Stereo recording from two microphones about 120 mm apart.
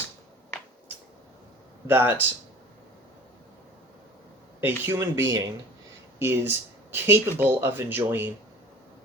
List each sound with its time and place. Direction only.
1.9 s speech: 20° right (ahead or behind)
4.6 s speech: 20° right (ahead or behind)